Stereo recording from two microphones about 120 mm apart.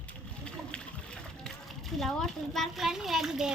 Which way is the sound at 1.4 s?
Centre (ahead or behind).